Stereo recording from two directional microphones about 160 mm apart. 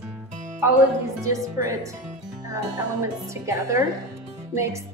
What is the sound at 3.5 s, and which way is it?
Speech, 20° right (ahead or behind).